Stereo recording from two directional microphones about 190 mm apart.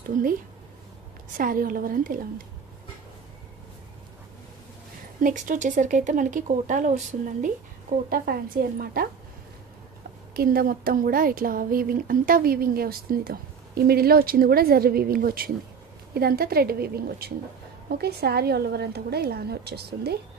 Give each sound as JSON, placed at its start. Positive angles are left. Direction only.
{"t": 1.3, "sound": "speech", "side_deg": -45}
{"t": 5.2, "sound": "speech", "side_deg": -45}
{"t": 8.1, "sound": "speech", "side_deg": -50}
{"t": 10.3, "sound": "speech", "side_deg": -50}